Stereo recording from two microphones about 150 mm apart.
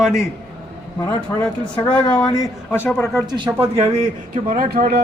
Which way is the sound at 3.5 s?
40° right (ahead or behind).